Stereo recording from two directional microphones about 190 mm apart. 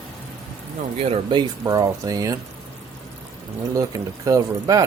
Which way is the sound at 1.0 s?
30° right (ahead or behind).